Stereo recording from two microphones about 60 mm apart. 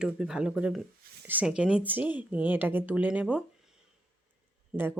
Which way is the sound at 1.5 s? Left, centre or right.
Centre.